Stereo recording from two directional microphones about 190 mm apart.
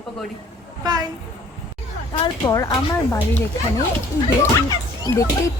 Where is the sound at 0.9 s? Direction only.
20° right (ahead or behind).